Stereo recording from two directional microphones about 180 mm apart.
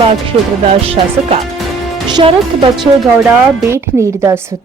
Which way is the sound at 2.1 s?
25° right (ahead or behind).